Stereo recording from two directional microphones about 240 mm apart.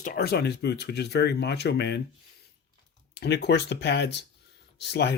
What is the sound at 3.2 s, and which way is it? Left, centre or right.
Speech, left.